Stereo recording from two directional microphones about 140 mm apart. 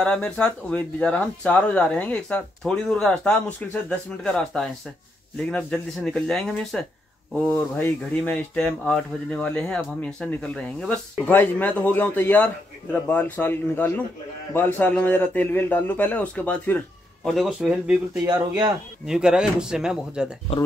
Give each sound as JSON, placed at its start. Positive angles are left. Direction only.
{"t": 0.0, "sound": "speech", "side_deg": 5}
{"t": 18.2, "sound": "speech", "side_deg": -30}
{"t": 19.0, "sound": "speech", "side_deg": -5}